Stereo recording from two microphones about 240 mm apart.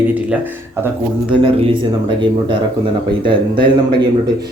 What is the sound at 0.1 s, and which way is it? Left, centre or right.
Speech, centre.